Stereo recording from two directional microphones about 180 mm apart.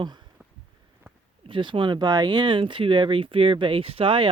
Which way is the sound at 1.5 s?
25° right (ahead or behind).